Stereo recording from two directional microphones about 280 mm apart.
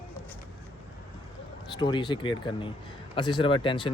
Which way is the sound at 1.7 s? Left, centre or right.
Centre.